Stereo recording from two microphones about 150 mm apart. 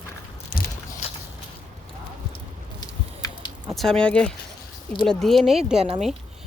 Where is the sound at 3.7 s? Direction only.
5° left (ahead or behind).